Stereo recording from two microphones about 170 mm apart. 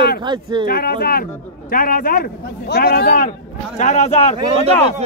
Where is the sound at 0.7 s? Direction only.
60° left (ahead or behind); by 4.3 s 40° left (ahead or behind).